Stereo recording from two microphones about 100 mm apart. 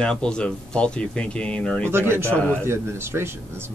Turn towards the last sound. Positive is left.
turn(degrees=-25)  # may be behind; listen again after turning